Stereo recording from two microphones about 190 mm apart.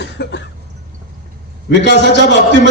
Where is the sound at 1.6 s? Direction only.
65° left (ahead or behind).